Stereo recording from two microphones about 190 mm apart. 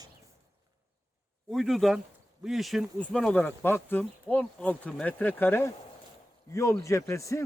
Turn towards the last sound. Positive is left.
turn(degrees=15)  # may be behind; listen again after turning